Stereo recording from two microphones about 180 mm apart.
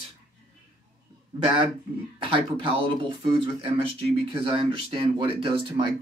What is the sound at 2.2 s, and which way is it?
Speech, 30° right (ahead or behind).